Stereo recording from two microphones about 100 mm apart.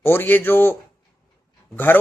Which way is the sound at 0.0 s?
20° left (ahead or behind).